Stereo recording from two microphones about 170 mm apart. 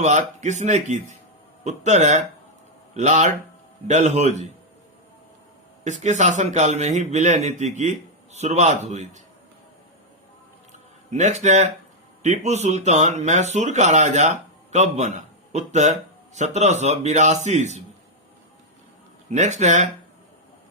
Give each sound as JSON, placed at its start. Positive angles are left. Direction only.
{"t": 0.0, "sound": "speech", "side_deg": -45}
{"t": 5.8, "sound": "speech", "side_deg": -45}
{"t": 10.7, "sound": "a sound", "side_deg": -45}
{"t": 12.2, "sound": "speech", "side_deg": -45}
{"t": 19.3, "sound": "speech", "side_deg": -45}